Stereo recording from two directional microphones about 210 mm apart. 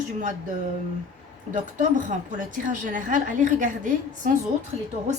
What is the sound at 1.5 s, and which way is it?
A woman's voice, 35° right (ahead or behind).